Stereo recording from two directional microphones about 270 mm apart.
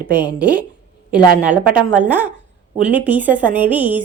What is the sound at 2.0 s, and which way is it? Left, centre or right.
A woman's voice, centre.